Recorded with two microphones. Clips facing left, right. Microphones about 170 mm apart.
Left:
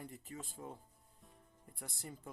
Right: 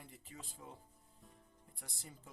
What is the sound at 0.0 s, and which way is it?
Speech, 45° left (ahead or behind).